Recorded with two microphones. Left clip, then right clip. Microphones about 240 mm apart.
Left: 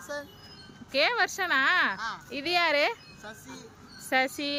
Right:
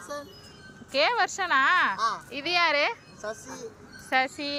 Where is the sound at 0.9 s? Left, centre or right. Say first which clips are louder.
Right 1 dB; centre.